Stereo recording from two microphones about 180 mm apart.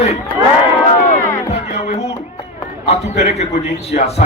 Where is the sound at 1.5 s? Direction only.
40° left (ahead or behind).